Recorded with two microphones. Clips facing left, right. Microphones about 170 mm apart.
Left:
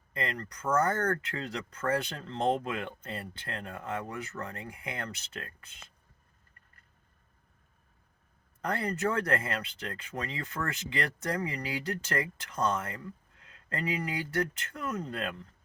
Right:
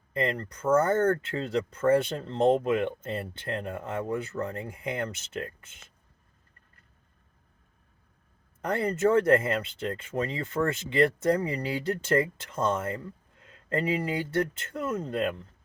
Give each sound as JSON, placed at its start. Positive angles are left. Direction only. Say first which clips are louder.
{"t": 0.1, "sound": "speech", "louder": "right 7 dB", "side_deg": -30}
{"t": 8.6, "sound": "speech", "louder": "right 6 dB", "side_deg": -25}